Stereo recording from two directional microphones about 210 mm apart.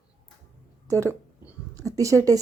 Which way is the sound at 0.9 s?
15° right (ahead or behind).